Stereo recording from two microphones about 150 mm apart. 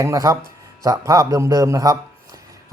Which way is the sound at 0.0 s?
20° right (ahead or behind).